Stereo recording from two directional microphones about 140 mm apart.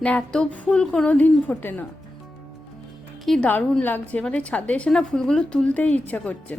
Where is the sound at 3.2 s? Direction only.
10° left (ahead or behind).